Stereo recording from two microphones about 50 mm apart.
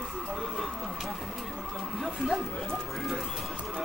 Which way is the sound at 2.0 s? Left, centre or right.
Centre.